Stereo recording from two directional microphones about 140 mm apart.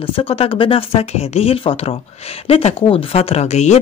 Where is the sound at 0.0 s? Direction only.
40° left (ahead or behind).